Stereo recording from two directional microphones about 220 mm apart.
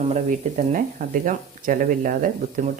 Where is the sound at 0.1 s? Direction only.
35° right (ahead or behind).